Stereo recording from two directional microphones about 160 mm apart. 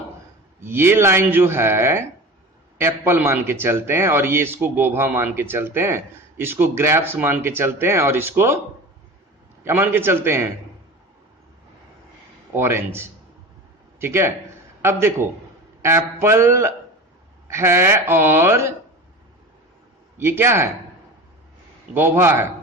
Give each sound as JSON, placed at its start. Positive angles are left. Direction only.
{"t": 0.6, "sound": "a man's voice", "side_deg": -15}
{"t": 9.6, "sound": "a man's voice", "side_deg": -15}
{"t": 12.5, "sound": "a man's voice", "side_deg": -15}
{"t": 20.1, "sound": "a man's voice", "side_deg": -15}
{"t": 21.9, "sound": "a man's voice", "side_deg": -15}